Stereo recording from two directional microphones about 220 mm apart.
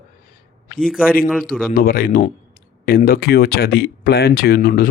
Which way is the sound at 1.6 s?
40° left (ahead or behind).